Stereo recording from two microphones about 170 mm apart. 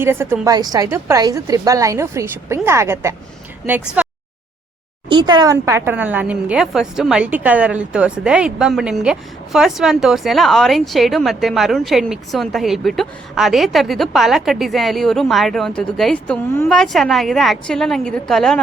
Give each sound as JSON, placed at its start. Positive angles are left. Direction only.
{"t": 0.0, "sound": "a woman's voice", "side_deg": -15}
{"t": 5.0, "sound": "speech", "side_deg": -25}